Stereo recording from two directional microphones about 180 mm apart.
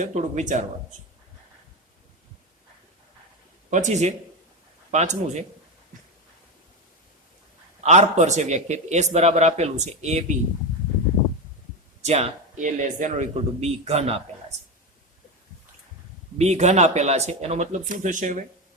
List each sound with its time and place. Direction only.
0.0 s speech: 40° right (ahead or behind)
3.7 s a man's voice: 40° right (ahead or behind)
7.9 s a man's voice: 40° right (ahead or behind)
12.0 s a man's voice: 40° right (ahead or behind)
16.4 s a man's voice: 40° right (ahead or behind)